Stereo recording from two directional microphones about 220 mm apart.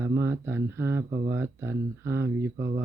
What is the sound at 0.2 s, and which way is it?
Speech, 10° right (ahead or behind).